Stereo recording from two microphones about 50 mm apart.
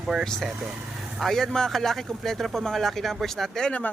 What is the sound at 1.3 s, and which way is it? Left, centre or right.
Speech, centre.